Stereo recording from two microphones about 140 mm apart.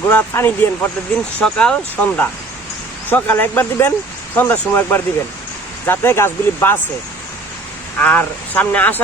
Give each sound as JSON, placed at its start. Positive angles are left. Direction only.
{"t": 0.1, "sound": "speech", "side_deg": 15}
{"t": 7.9, "sound": "speech", "side_deg": 10}